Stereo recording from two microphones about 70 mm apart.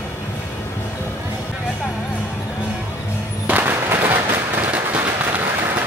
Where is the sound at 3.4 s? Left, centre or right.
Right.